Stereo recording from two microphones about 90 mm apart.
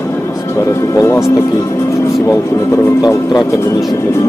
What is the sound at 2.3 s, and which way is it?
Speech, 30° left (ahead or behind).